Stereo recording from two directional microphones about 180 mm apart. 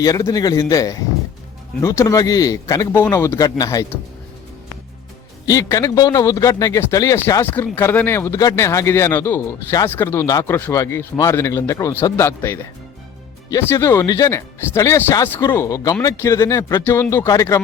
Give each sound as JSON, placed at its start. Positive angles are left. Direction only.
{"t": 0.0, "sound": "a man's voice", "side_deg": 20}
{"t": 5.5, "sound": "a man's voice", "side_deg": 20}